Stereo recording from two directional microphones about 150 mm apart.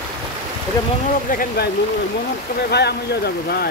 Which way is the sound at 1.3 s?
70° left (ahead or behind).